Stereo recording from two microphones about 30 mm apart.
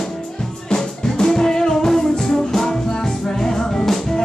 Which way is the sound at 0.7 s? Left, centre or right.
Left.